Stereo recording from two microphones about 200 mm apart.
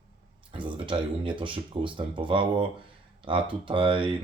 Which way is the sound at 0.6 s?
25° right (ahead or behind).